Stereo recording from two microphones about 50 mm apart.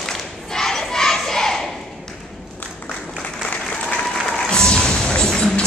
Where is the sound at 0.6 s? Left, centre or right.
Centre.